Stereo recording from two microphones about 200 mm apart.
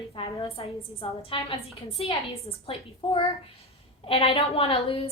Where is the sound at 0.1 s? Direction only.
25° left (ahead or behind).